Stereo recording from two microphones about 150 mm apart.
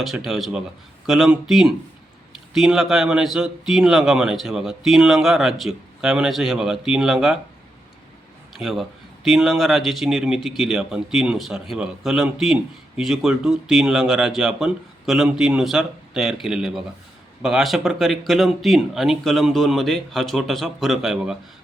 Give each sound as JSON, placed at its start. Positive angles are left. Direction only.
{"t": 0.3, "sound": "a man's voice", "side_deg": 0}
{"t": 8.5, "sound": "a man's voice", "side_deg": 0}